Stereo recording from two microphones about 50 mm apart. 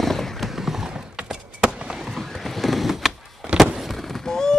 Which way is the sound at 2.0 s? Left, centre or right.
Centre.